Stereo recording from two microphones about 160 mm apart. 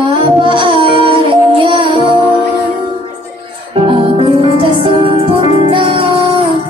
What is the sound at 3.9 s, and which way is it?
Music, 35° right (ahead or behind).